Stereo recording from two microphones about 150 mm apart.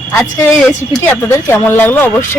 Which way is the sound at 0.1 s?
15° left (ahead or behind).